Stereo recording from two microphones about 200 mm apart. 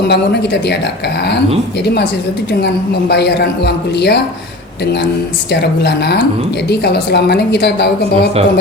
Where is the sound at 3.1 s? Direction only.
55° left (ahead or behind).